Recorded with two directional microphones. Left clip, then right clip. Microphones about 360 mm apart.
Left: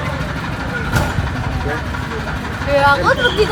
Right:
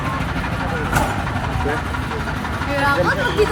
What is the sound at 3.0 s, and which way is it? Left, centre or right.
Speech, right.